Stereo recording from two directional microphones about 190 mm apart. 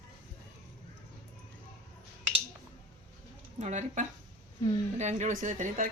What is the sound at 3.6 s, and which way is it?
A woman's voice, 40° right (ahead or behind).